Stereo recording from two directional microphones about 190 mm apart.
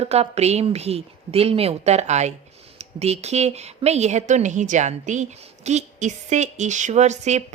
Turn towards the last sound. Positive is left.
turn(degrees=-40)  # may be behind; listen again after turning